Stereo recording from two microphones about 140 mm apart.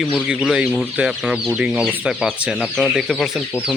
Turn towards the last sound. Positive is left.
turn(degrees=0)  # may be behind; listen again after turning